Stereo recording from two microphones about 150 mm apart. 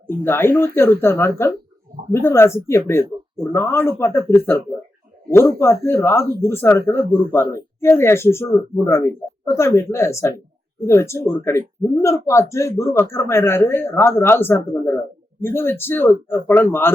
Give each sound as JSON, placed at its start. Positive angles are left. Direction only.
{"t": 0.3, "sound": "speech", "side_deg": 15}